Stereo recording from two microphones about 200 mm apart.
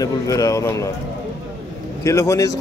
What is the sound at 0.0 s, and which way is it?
Speech, 15° left (ahead or behind).